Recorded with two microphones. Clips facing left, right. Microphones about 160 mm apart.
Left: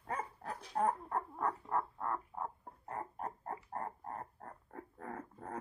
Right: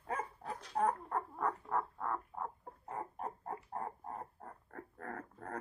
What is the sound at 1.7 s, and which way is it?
Frog, centre (ahead or behind).